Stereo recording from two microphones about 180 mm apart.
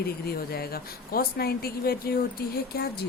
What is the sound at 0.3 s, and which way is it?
Speech, 60° left (ahead or behind).